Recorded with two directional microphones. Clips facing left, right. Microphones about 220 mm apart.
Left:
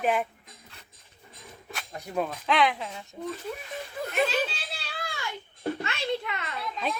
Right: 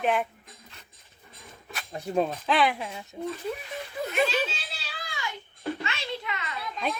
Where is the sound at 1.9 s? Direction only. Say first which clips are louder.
Right 4 dB; 25° right (ahead or behind).